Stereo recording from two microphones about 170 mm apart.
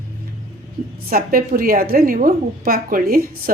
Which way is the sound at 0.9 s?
60° right (ahead or behind).